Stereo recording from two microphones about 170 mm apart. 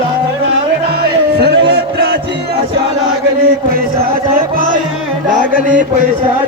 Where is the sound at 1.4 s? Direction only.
85° right.